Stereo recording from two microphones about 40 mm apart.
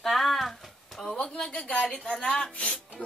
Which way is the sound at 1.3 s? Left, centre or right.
Left.